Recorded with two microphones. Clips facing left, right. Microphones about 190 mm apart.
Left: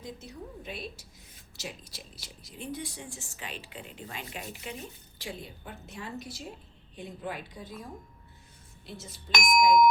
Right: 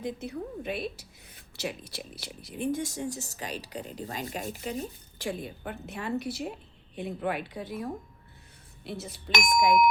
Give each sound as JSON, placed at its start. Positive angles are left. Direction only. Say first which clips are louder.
{"t": 0.0, "sound": "a woman's voice", "louder": "right 8 dB", "side_deg": -60}